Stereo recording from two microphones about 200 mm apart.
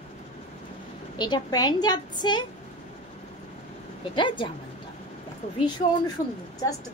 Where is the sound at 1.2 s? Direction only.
20° left (ahead or behind).